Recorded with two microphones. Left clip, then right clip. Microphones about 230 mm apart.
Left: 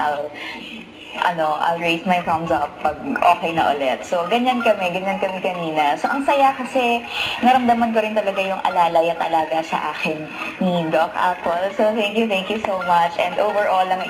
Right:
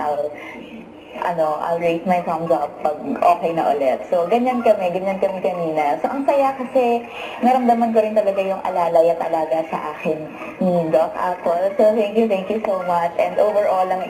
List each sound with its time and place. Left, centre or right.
1.2 s a woman's voice: left